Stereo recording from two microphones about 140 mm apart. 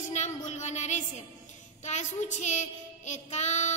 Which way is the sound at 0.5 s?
55° left (ahead or behind).